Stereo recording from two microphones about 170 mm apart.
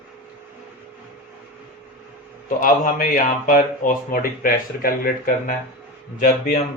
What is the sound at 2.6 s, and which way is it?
A man's voice, 55° left (ahead or behind).